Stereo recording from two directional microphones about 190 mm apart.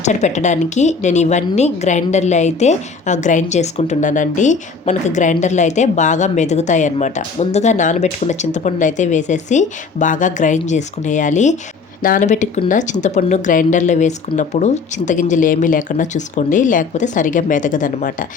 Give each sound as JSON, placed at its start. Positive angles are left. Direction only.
{"t": 0.0, "sound": "a woman's voice", "side_deg": 40}